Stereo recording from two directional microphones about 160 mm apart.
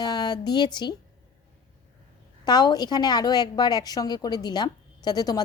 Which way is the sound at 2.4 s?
25° left (ahead or behind).